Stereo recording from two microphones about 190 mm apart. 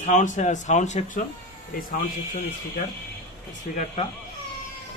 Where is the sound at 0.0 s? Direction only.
40° left (ahead or behind).